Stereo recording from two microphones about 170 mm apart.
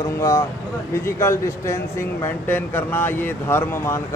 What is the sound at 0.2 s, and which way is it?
Speech, 20° left (ahead or behind).